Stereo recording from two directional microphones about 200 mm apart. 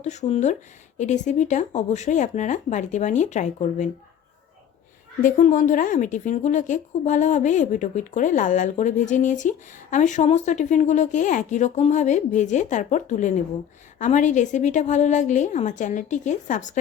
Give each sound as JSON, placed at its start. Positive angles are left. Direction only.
{"t": 0.0, "sound": "a woman's voice", "side_deg": 35}
{"t": 5.2, "sound": "a woman's voice", "side_deg": 40}